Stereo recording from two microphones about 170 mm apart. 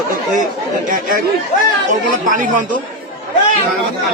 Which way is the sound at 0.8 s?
50° right (ahead or behind).